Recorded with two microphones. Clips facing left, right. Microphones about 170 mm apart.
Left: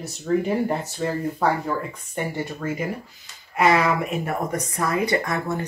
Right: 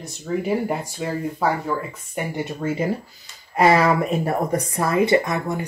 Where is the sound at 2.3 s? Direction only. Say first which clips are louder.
Right 3 dB; 20° right (ahead or behind).